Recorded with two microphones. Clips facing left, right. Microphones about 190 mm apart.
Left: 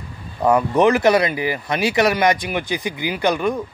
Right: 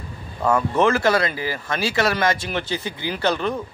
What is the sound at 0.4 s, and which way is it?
Speech, 15° left (ahead or behind).